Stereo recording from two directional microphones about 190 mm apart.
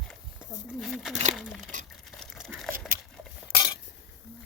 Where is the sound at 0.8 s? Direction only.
Centre (ahead or behind).